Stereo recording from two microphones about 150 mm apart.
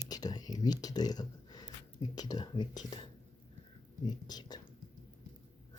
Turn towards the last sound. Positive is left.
turn(degrees=25)  # may be behind; listen again after turning